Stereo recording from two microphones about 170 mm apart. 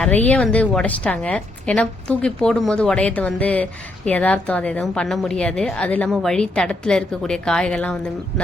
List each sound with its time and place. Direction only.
0.0 s a woman's voice: 10° left (ahead or behind)